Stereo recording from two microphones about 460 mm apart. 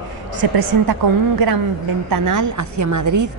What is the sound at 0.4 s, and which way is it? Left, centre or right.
Speech, right.